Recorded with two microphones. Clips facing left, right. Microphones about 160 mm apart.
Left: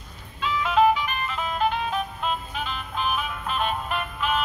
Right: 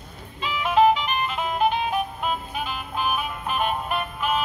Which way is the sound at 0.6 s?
20° right (ahead or behind).